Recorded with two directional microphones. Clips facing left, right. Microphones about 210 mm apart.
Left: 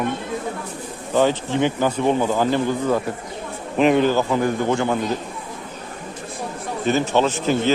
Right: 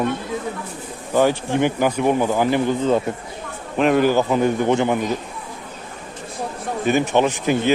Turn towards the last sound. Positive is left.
turn(degrees=-15)  # may be behind; listen again after turning